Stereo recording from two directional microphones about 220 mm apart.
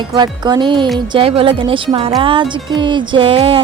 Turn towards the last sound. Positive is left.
turn(degrees=-25)  # may be behind; listen again after turning